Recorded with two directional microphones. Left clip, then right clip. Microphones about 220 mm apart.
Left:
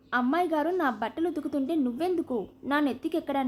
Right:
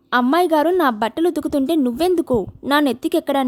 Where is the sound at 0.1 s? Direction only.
45° right (ahead or behind).